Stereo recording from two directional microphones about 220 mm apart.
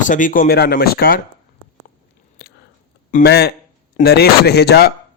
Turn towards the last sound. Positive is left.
turn(degrees=45)  # may be behind; listen again after turning